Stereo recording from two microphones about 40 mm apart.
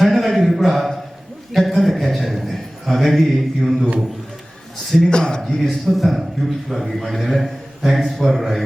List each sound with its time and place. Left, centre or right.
0.0 s a sound: centre
1.5 s a man's voice: centre
5.0 s speech: centre
5.4 s a man's voice: centre